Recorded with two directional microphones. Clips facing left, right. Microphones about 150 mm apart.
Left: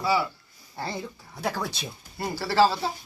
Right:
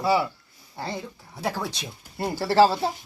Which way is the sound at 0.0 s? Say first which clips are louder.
Right 3 dB; 25° right (ahead or behind).